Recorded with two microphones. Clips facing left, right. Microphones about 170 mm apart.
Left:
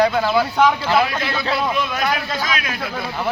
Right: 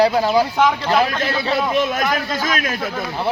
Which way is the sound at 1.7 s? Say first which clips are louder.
Right 3 dB; 45° right (ahead or behind).